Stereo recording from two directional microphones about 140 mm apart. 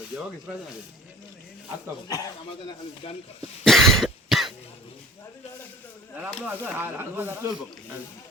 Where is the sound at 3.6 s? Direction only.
Centre (ahead or behind).